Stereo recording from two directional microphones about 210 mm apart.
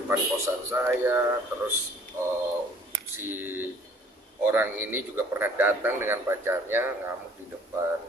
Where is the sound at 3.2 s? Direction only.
10° right (ahead or behind).